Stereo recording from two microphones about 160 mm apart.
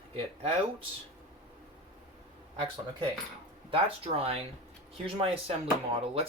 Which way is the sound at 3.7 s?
35° right (ahead or behind).